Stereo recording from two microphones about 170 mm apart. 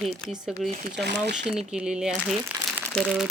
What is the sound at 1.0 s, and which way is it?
Speech, 90° right.